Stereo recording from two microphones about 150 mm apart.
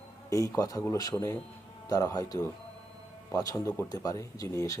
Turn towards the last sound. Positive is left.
turn(degrees=25)  # may be behind; listen again after turning